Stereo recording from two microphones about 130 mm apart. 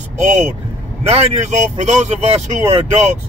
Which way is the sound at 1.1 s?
60° right (ahead or behind).